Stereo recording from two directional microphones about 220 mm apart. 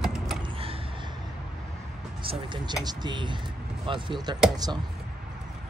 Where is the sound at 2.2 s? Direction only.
20° right (ahead or behind).